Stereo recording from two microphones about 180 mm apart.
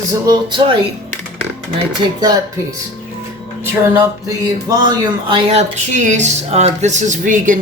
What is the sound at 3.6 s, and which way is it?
Speech, 15° right (ahead or behind).